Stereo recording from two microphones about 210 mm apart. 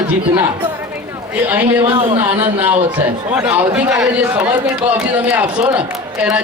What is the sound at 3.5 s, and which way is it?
Speech, 5° right (ahead or behind).